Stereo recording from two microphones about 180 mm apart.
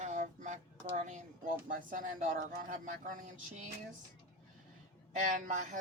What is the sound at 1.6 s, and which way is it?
Speech, 50° right (ahead or behind).